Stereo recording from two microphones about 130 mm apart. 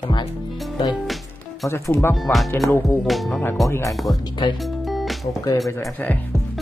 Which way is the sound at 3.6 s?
25° left (ahead or behind).